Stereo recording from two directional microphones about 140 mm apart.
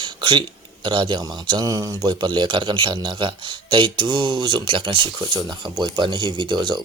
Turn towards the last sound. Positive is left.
turn(degrees=-35)  # may be behind; listen again after turning